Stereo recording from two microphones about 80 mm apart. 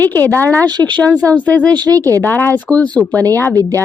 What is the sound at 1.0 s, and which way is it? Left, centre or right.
Speech, right.